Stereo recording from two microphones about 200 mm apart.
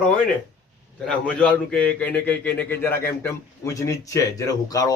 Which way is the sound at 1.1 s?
5° left (ahead or behind).